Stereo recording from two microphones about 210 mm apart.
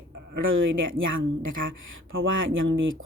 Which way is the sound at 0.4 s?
70° right (ahead or behind).